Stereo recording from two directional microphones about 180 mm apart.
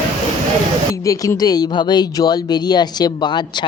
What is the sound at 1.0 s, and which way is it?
Speech, 20° left (ahead or behind).